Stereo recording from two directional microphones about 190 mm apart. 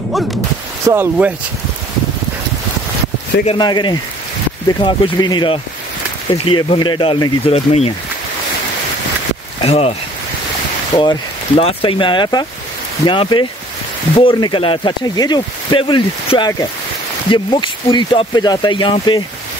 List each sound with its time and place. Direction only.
0.8 s speech: 10° right (ahead or behind)
3.4 s speech: 25° left (ahead or behind)
9.6 s speech: 30° left (ahead or behind)
11.0 s speech: 25° left (ahead or behind)